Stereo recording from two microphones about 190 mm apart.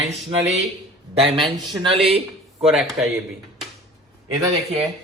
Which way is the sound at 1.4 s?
Centre (ahead or behind).